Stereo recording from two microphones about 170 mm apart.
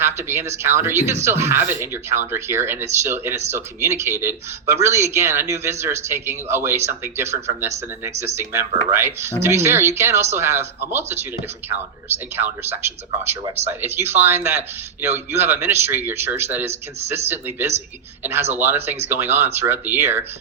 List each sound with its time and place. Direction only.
0.0 s speech: 15° right (ahead or behind)